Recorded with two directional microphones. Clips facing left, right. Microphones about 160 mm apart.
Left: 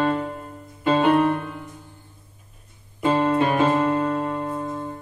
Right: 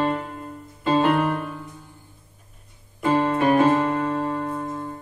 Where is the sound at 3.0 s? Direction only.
20° left (ahead or behind).